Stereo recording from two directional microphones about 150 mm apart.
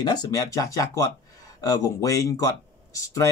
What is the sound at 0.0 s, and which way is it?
Speech, 25° left (ahead or behind).